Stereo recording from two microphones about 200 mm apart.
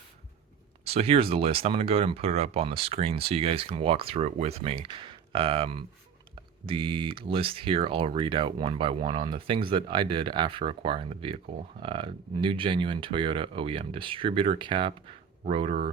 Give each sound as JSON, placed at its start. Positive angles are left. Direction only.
{"t": 0.9, "sound": "speech", "side_deg": -30}